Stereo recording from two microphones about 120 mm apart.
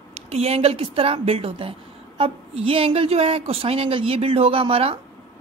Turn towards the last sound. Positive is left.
turn(degrees=-55)  # may be behind; listen again after turning